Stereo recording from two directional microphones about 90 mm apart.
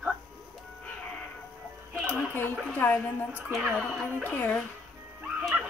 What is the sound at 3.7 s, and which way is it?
Speech, 10° left (ahead or behind).